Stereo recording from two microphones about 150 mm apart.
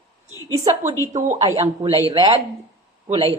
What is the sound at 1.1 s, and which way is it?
A woman's voice, 45° right (ahead or behind).